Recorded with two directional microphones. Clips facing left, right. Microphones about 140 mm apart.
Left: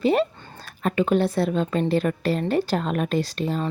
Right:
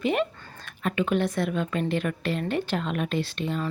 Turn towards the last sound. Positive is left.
turn(degrees=40)  # may be behind; listen again after turning